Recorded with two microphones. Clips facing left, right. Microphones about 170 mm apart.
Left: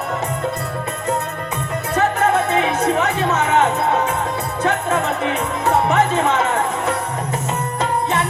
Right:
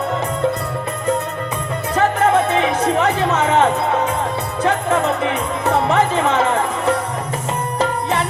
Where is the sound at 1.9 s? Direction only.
30° right (ahead or behind).